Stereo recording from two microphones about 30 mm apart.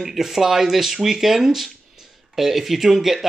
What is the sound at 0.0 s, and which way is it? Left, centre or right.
Speech, centre.